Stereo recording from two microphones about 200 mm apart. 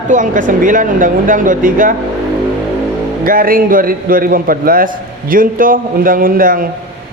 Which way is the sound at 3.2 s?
45° right (ahead or behind).